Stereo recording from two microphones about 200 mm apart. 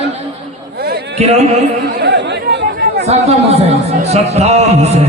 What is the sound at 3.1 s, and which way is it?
A man's voice, 30° right (ahead or behind).